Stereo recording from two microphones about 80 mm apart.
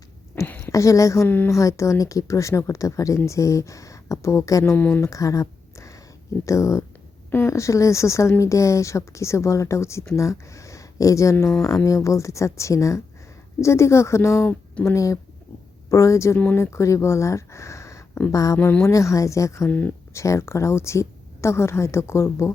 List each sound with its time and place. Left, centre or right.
0.4 s a sound: left
0.7 s a woman's voice: left
4.6 s speech: left
5.0 s a sound: left
6.4 s a woman's voice: left
18.5 s speech: left
18.9 s speech: left
19.6 s speech: left
20.1 s speech: left